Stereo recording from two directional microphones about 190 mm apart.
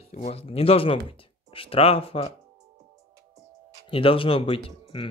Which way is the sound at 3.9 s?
30° left (ahead or behind).